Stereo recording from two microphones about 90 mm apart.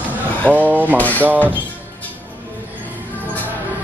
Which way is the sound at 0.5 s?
15° right (ahead or behind).